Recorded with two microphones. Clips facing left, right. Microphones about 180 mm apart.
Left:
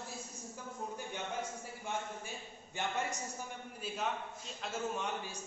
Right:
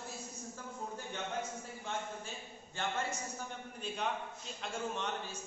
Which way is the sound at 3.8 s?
5° left (ahead or behind).